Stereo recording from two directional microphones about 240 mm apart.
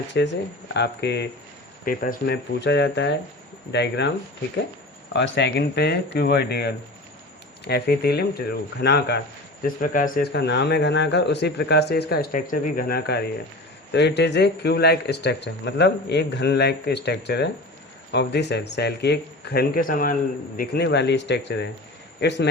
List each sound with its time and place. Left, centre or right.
0.1 s a man's voice: left
5.1 s a man's voice: left